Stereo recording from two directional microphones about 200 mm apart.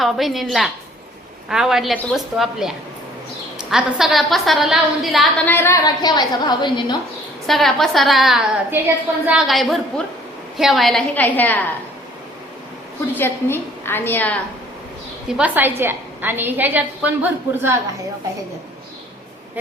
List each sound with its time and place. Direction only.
0.0 s a woman's voice: centre (ahead or behind)
5.5 s a woman's voice: 10° left (ahead or behind)
7.4 s a woman's voice: centre (ahead or behind)
13.1 s a woman's voice: 10° left (ahead or behind)
15.3 s a woman's voice: 5° right (ahead or behind)